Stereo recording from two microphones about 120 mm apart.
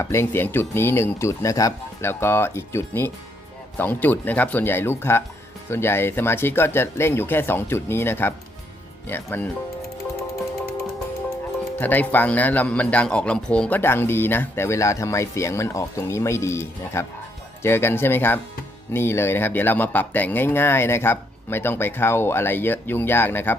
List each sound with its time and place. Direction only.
0.0 s a man's voice: 20° left (ahead or behind)
11.8 s a man's voice: 15° left (ahead or behind)